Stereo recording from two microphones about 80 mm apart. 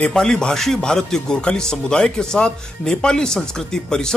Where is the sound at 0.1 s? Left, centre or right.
Centre.